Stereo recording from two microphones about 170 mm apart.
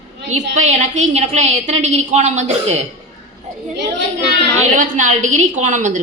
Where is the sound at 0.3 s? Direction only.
45° right (ahead or behind).